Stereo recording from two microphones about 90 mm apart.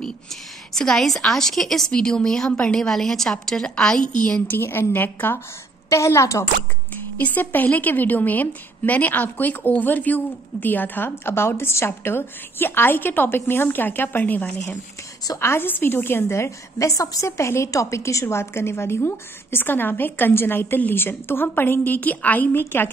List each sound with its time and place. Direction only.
0.7 s a woman's voice: 5° left (ahead or behind)
4.5 s a woman's voice: 25° left (ahead or behind)
5.9 s a woman's voice: 35° left (ahead or behind)
7.2 s a woman's voice: 20° left (ahead or behind)